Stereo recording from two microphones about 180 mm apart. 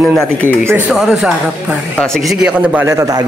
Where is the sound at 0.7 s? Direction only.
10° right (ahead or behind).